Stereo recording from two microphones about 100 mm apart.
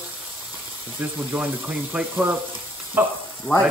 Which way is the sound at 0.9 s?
20° right (ahead or behind).